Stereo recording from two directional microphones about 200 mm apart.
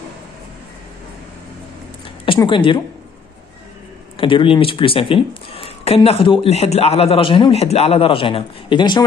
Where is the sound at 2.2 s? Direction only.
25° left (ahead or behind).